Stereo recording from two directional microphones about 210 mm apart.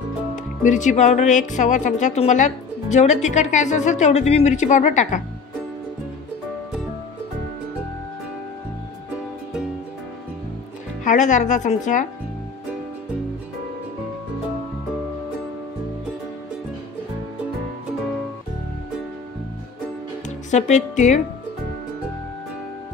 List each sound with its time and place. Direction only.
0.7 s a woman's voice: 35° left (ahead or behind)
11.1 s a woman's voice: 35° left (ahead or behind)
20.2 s speech: 35° left (ahead or behind)